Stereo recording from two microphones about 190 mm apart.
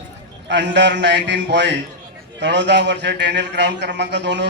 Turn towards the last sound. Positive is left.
turn(degrees=-65)  # may be behind; listen again after turning